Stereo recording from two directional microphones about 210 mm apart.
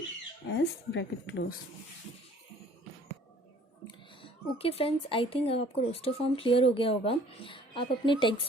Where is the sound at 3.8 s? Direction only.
25° left (ahead or behind).